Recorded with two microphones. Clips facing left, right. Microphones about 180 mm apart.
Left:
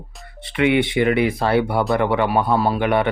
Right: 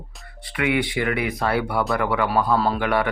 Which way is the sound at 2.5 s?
15° left (ahead or behind).